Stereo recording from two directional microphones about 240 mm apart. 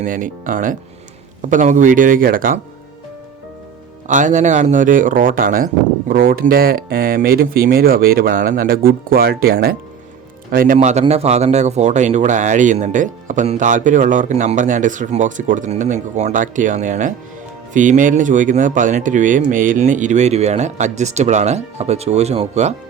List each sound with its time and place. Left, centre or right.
0.0 s speech: right
4.1 s speech: right